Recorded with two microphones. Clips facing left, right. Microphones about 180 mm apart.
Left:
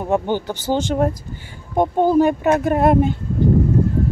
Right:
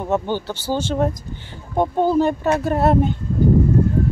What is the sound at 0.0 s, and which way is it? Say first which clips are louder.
Speech: left 2 dB; 15° left (ahead or behind).